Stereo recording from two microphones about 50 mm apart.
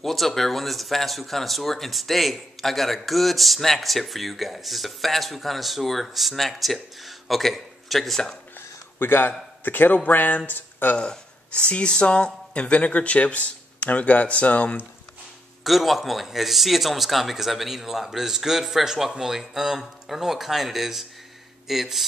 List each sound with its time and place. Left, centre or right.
0.0 s speech: centre
8.5 s a sound: left
9.7 s speech: left
11.0 s speech: centre
15.6 s speech: centre